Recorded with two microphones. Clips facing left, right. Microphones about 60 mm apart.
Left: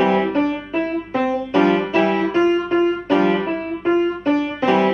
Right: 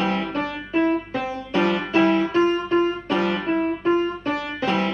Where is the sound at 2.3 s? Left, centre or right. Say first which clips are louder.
Left 3 dB; centre.